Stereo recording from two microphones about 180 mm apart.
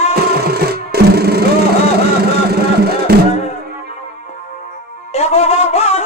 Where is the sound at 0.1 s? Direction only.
60° right (ahead or behind).